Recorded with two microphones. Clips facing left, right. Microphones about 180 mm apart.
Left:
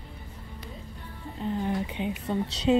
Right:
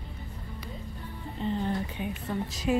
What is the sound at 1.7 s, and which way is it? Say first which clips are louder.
A woman's voice: left 3 dB; 20° left (ahead or behind).